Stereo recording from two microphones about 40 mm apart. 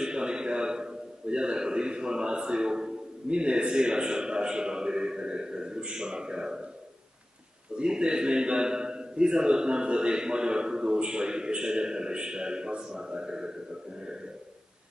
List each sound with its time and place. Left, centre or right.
0.0 s a man's voice: centre
7.7 s a man's voice: right